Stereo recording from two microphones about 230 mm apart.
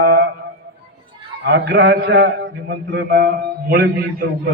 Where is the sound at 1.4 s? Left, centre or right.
Right.